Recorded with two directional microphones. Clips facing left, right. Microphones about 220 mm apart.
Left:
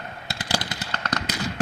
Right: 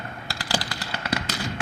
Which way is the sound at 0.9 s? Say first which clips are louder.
Right 2 dB; 10° right (ahead or behind).